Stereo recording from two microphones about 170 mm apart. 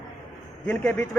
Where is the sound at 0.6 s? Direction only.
10° left (ahead or behind).